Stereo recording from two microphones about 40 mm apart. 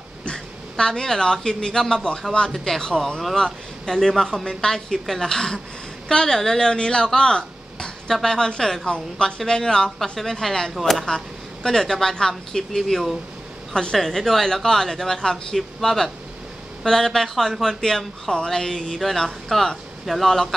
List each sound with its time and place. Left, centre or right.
0.2 s speech: left
18.9 s speech: centre